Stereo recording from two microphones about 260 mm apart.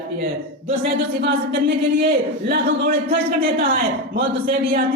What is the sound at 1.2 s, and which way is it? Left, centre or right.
A woman's voice, right.